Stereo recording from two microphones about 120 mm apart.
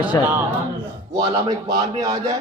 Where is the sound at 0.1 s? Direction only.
25° left (ahead or behind).